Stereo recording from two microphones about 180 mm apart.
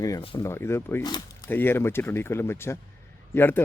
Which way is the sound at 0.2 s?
30° left (ahead or behind).